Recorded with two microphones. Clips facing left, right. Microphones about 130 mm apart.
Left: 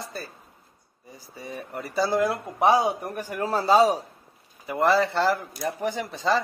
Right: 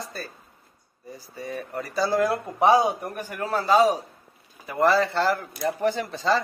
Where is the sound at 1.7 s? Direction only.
25° left (ahead or behind).